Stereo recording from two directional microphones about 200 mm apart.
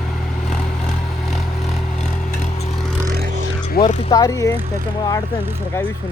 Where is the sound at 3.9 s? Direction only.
35° left (ahead or behind).